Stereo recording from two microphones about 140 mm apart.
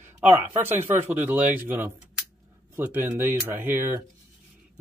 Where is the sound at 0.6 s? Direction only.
15° right (ahead or behind).